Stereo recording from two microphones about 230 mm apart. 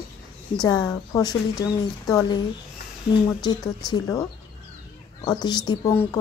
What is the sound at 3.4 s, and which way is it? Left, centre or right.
Speech, centre.